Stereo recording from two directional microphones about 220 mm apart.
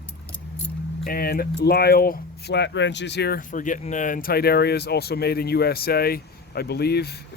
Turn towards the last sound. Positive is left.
turn(degrees=45)  # may be behind; listen again after turning